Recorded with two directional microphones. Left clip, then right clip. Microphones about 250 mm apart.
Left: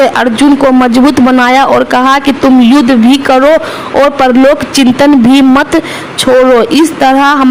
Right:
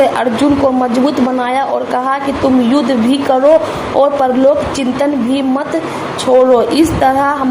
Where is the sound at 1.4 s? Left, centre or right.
Left.